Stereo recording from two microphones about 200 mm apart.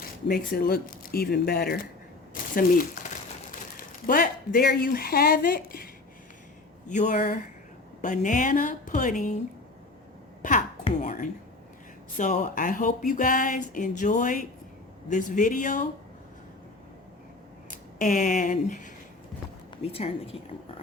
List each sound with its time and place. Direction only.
0.3 s speech: 45° left (ahead or behind)
2.3 s a sound: 45° left (ahead or behind)
4.0 s speech: 45° left (ahead or behind)
11.0 s a sound: 40° left (ahead or behind)
12.1 s speech: 40° left (ahead or behind)
17.7 s a woman's voice: 40° left (ahead or behind)